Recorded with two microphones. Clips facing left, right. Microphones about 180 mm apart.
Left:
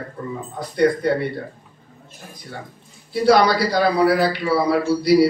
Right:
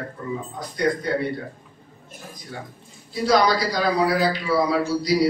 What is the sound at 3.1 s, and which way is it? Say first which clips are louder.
A man's voice: left 4 dB; 60° left (ahead or behind).